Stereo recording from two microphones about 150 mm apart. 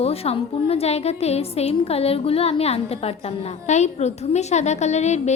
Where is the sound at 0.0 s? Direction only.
40° left (ahead or behind).